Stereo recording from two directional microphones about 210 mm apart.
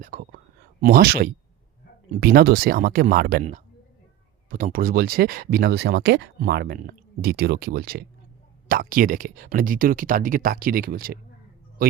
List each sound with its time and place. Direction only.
0.0 s speech: 45° right (ahead or behind)
4.4 s speech: 40° right (ahead or behind)